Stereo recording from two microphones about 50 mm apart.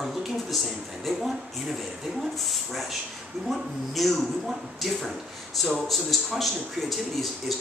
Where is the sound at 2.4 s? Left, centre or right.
Centre.